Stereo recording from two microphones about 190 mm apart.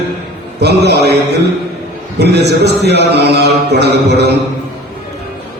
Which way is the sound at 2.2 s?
60° right (ahead or behind).